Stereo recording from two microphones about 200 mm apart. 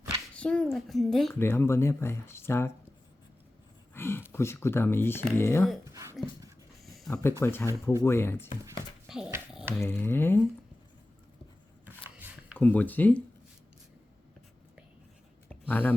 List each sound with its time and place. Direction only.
0.3 s a woman's voice: 5° left (ahead or behind)
1.3 s speech: 10° left (ahead or behind)
3.9 s speech: 10° left (ahead or behind)
5.8 s a sound: 15° right (ahead or behind)
6.8 s a sound: centre (ahead or behind)
7.2 s speech: 10° left (ahead or behind)
9.0 s dog: 5° right (ahead or behind)
9.7 s speech: 10° left (ahead or behind)
12.5 s speech: 10° left (ahead or behind)
15.4 s a sound: 10° left (ahead or behind)